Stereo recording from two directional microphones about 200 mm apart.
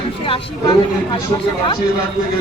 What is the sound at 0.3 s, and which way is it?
Speech, 25° left (ahead or behind).